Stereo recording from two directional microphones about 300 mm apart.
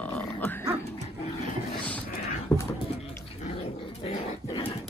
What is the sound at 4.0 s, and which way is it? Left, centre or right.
Dog, centre.